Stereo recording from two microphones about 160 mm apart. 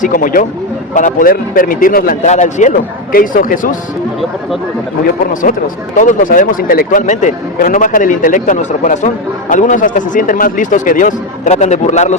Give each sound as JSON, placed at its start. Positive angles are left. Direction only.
{"t": 0.0, "sound": "speech", "side_deg": 60}
{"t": 2.2, "sound": "speech", "side_deg": 45}
{"t": 5.3, "sound": "speech", "side_deg": 60}